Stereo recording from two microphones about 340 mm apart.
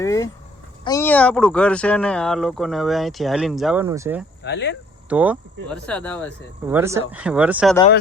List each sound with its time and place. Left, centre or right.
0.0 s speech: centre
4.4 s speech: left
5.0 s speech: centre